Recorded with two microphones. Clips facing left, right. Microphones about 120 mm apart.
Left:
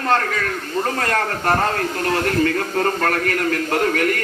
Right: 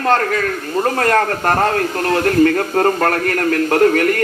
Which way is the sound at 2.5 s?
40° right (ahead or behind).